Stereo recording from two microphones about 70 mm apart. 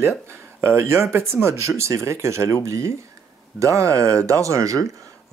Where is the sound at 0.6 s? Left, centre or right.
Right.